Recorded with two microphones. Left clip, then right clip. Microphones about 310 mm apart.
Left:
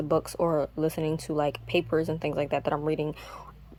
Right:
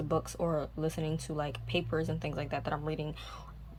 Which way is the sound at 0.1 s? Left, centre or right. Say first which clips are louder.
Left 7 dB; centre.